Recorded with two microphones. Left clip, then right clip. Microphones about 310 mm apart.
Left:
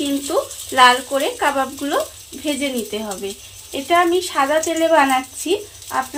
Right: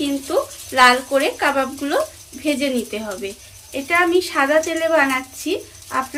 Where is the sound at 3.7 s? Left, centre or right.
Left.